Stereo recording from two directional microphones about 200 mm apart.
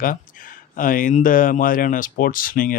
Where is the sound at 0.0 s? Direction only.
45° left (ahead or behind).